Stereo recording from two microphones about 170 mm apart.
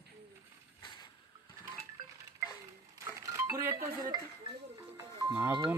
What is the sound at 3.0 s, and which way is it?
Music, 20° right (ahead or behind).